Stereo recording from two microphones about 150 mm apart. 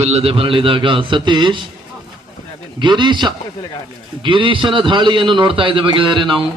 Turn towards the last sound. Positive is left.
turn(degrees=-35)  # may be behind; listen again after turning